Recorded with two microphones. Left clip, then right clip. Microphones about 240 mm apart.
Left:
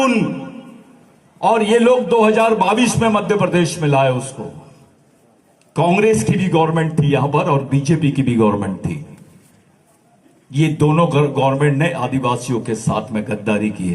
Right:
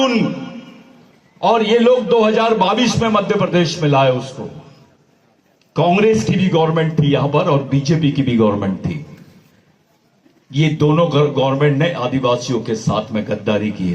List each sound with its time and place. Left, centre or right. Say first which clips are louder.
0.0 s a man's voice: even; left
1.4 s a man's voice: even; left
5.7 s a man's voice: right 1 dB; left
10.5 s a man's voice: right 1 dB; left